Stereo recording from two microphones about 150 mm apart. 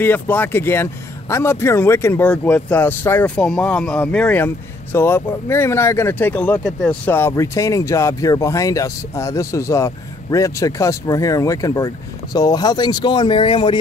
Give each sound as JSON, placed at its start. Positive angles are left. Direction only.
{"t": 0.0, "sound": "speech", "side_deg": 15}